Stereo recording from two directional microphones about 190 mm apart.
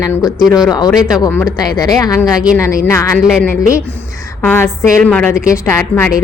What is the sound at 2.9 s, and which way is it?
Speech, 15° left (ahead or behind).